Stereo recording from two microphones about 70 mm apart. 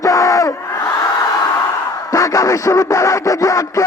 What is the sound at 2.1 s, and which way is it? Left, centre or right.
Music, left.